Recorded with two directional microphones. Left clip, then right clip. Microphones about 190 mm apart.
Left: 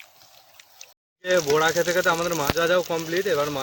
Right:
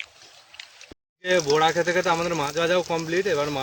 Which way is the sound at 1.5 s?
15° right (ahead or behind).